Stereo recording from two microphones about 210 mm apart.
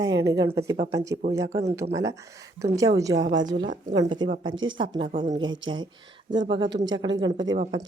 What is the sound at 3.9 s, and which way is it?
Speech, 20° right (ahead or behind).